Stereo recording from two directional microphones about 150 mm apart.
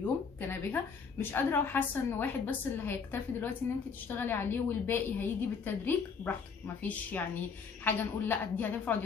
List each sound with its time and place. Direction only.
0.0 s a woman's voice: 15° left (ahead or behind)